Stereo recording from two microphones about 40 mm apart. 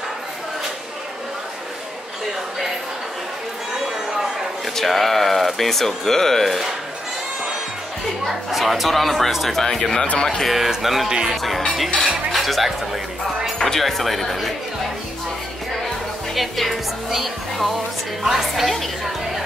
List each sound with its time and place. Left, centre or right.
4.7 s speech: centre
8.3 s speech: centre
9.6 s speech: centre
10.5 s speech: centre
11.1 s speech: centre
12.3 s speech: centre
13.6 s speech: centre
16.3 s speech: centre